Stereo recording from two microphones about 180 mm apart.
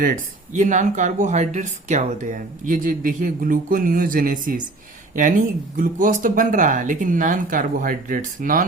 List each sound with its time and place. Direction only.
0.0 s speech: 45° right (ahead or behind)